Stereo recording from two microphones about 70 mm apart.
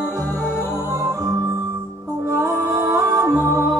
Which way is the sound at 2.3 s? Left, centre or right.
Right.